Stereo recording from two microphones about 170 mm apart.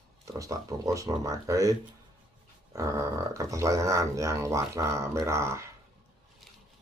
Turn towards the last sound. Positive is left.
turn(degrees=-15)  # may be behind; listen again after turning